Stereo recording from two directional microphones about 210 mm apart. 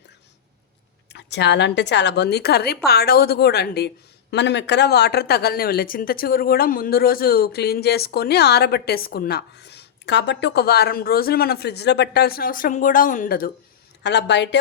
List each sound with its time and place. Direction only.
1.1 s a woman's voice: 55° left (ahead or behind)
14.0 s speech: 55° left (ahead or behind)